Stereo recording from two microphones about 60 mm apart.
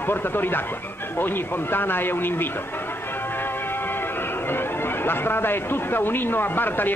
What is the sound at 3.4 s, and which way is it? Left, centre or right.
Music, left.